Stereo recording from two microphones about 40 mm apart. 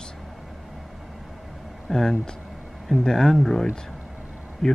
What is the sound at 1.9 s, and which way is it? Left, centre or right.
Speech, centre.